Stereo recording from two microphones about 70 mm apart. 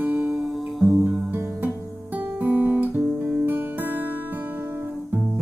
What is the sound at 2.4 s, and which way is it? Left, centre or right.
Guitar, right.